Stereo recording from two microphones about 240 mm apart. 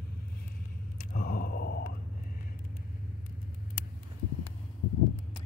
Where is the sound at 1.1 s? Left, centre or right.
Left.